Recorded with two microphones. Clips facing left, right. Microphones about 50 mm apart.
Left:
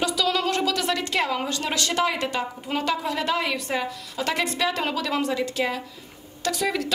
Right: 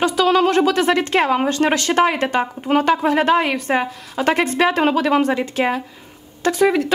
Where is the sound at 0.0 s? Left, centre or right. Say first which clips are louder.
Right 8 dB; right.